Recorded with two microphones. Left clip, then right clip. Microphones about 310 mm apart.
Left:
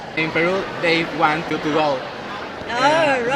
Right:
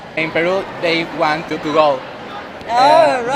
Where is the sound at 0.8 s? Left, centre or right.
Centre.